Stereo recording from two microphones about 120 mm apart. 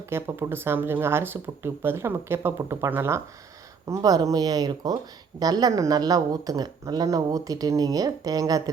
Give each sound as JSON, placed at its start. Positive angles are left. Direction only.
{"t": 0.1, "sound": "speech", "side_deg": -20}